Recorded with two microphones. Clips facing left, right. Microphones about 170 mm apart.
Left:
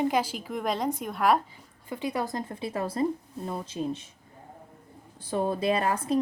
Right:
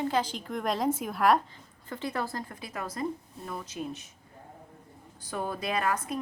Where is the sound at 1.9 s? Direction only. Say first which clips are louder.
Left 3 dB; 15° left (ahead or behind); by 4.0 s 30° left (ahead or behind).